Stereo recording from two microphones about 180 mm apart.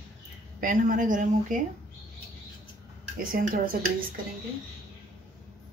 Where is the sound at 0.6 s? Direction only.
45° right (ahead or behind).